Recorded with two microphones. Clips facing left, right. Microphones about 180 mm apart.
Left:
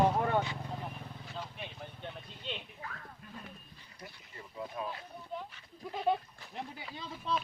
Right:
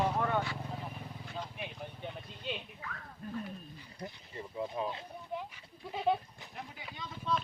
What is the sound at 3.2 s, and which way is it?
Speech, 40° right (ahead or behind).